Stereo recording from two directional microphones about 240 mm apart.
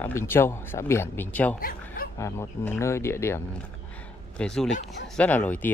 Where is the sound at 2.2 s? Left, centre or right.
Centre.